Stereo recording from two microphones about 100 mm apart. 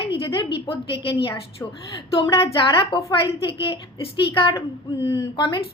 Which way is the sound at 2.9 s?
55° left (ahead or behind).